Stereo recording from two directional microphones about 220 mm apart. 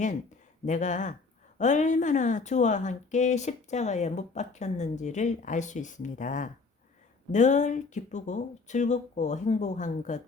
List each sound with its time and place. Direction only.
0.6 s speech: 35° left (ahead or behind)